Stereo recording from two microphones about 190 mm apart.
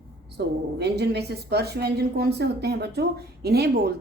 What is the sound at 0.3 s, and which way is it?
A woman's voice, 60° right (ahead or behind).